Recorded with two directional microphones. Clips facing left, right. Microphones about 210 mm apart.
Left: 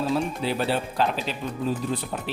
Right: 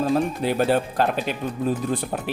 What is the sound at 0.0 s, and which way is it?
Speech, 50° right (ahead or behind).